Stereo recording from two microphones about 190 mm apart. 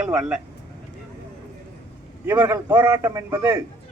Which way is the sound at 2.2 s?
10° right (ahead or behind).